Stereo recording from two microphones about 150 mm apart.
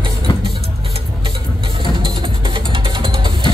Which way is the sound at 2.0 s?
35° right (ahead or behind).